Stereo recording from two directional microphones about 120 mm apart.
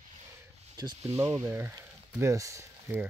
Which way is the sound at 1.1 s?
25° right (ahead or behind).